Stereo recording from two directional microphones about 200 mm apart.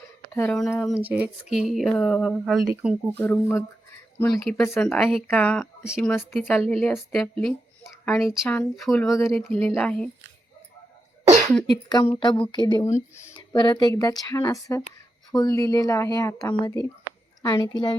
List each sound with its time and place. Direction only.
0.3 s speech: 5° left (ahead or behind)
1.0 s speech: 5° right (ahead or behind)
4.6 s speech: 10° left (ahead or behind)
4.9 s speech: centre (ahead or behind)
11.6 s speech: 20° left (ahead or behind)